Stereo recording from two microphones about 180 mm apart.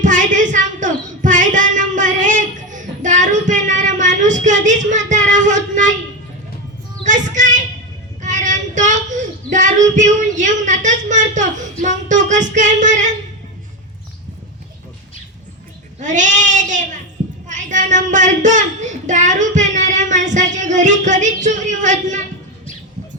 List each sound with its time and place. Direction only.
0.0 s child singing: 45° right (ahead or behind)
7.0 s child singing: 45° right (ahead or behind)
16.0 s a sound: 45° right (ahead or behind)